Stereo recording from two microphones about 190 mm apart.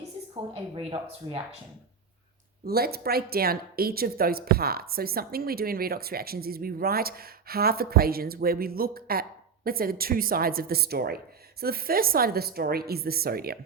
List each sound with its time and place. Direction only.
0.5 s speech: 30° right (ahead or behind)
2.6 s a woman's voice: 55° right (ahead or behind)